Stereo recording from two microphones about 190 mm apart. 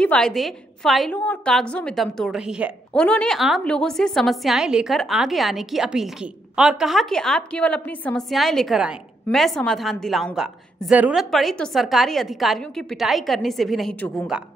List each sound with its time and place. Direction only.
0.0 s a woman's voice: 5° left (ahead or behind)